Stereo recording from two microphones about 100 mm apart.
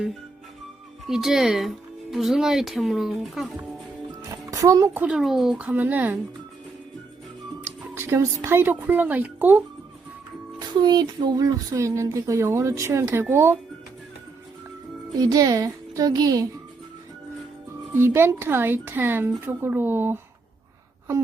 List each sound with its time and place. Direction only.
1.0 s speech: 5° right (ahead or behind)
4.2 s music: 35° right (ahead or behind)
4.9 s speech: 10° right (ahead or behind)
7.6 s music: 25° right (ahead or behind)
8.4 s speech: 20° right (ahead or behind)
10.8 s speech: 45° right (ahead or behind); by 13.6 s 25° right (ahead or behind)
15.2 s speech: 35° right (ahead or behind)
17.9 s speech: 25° right (ahead or behind)